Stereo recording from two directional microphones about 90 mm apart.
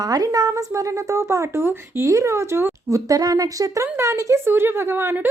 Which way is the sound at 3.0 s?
40° right (ahead or behind).